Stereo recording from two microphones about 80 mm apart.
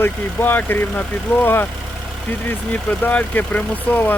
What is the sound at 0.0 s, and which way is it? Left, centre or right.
Speech, left.